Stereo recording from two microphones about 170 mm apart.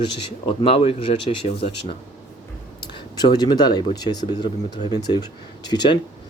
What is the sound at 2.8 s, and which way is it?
Speech, 25° left (ahead or behind).